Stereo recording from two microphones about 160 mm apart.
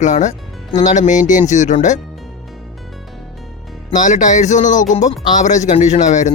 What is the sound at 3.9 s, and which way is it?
Speech, 50° left (ahead or behind).